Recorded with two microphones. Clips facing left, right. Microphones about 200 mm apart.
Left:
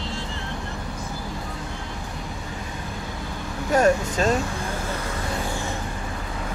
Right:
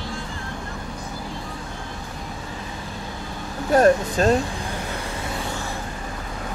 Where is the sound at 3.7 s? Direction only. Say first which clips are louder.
Right 3 dB; 35° right (ahead or behind).